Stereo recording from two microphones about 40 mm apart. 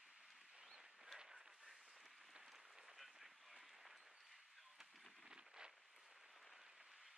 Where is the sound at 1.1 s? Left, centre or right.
Centre.